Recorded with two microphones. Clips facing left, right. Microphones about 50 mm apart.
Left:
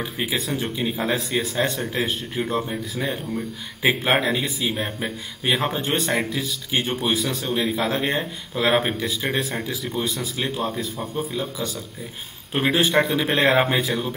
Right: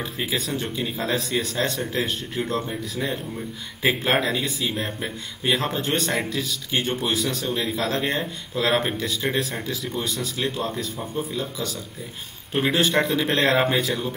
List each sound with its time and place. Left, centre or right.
0.0 s speech: centre